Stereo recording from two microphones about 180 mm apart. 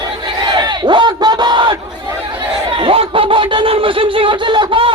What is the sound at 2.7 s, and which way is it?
Snicker, 30° right (ahead or behind).